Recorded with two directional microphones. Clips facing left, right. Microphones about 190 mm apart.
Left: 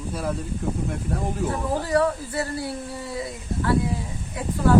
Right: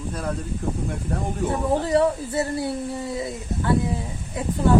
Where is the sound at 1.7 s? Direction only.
25° right (ahead or behind).